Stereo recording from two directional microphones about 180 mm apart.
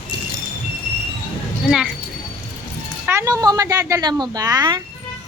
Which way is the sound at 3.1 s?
15° right (ahead or behind).